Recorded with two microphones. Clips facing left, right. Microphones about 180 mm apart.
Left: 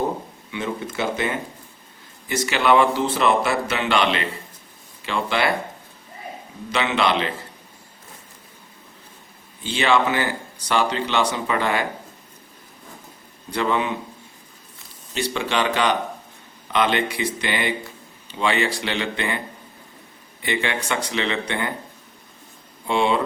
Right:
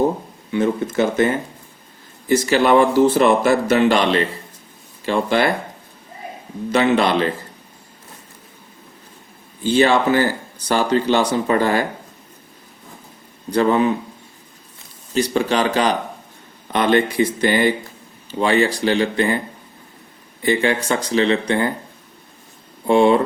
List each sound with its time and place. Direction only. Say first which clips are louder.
0.5 s speech: right 9 dB; 45° right (ahead or behind)
6.7 s speech: right 5 dB; 45° right (ahead or behind)
9.6 s speech: right 5 dB; 40° right (ahead or behind)
13.5 s speech: right 7 dB; 40° right (ahead or behind)
15.1 s speech: right 6 dB; 40° right (ahead or behind)
20.4 s speech: right 7 dB; 35° right (ahead or behind)
22.9 s speech: right 7 dB; 45° right (ahead or behind)